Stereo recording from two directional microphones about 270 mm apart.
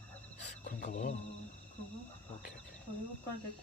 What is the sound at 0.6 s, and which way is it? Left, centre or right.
Wild animals, left.